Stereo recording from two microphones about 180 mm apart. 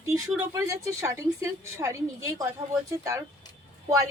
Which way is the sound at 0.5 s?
15° right (ahead or behind).